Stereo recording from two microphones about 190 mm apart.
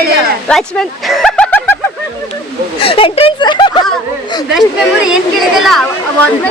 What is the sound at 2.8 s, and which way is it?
Speech, 30° left (ahead or behind).